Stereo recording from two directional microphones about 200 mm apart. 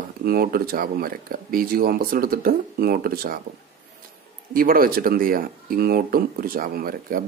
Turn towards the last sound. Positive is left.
turn(degrees=-45)  # may be behind; listen again after turning